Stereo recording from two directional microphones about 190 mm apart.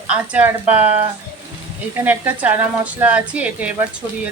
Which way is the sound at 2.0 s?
10° right (ahead or behind).